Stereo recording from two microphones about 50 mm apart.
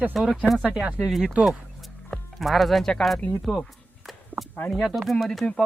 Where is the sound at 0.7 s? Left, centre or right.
Right.